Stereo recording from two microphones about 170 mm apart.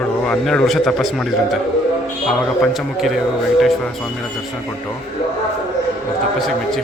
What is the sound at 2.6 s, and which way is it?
Speech, centre (ahead or behind).